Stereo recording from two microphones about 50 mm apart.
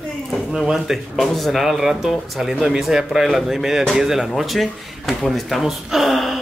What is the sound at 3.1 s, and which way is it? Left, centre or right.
A man's voice, centre.